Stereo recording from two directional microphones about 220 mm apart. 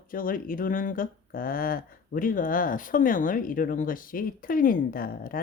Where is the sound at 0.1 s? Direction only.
40° left (ahead or behind).